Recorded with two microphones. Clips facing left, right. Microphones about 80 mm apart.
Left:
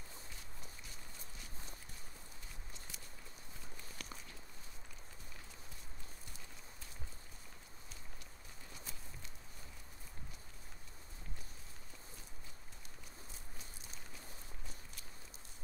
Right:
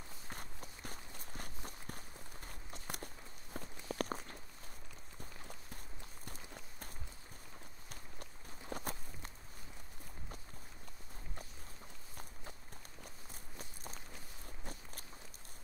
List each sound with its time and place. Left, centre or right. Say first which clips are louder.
0.3 s walk: right 6 dB; right
2.4 s clip-clop: right 10 dB; right
3.5 s walk: right 14 dB; right
6.2 s clip-clop: right 5 dB; right
7.9 s walk: right 6 dB; right
14.6 s walk: right 5 dB; right